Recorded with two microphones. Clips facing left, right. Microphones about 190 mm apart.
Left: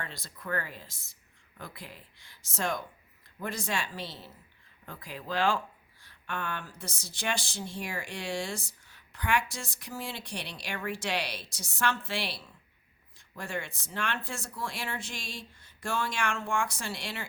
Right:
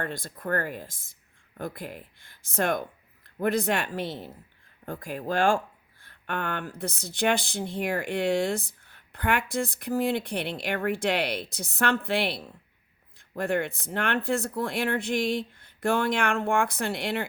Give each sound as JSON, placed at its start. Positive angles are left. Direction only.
{"t": 0.0, "sound": "speech", "side_deg": -50}